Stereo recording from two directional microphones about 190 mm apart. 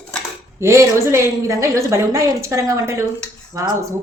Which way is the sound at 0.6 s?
15° right (ahead or behind).